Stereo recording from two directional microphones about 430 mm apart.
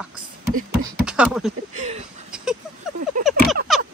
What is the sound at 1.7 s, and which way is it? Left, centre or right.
Speech, centre.